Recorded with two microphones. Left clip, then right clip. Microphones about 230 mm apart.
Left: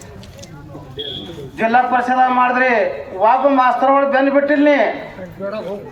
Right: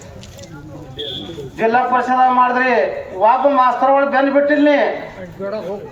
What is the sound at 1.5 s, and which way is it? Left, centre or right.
A man's voice, left.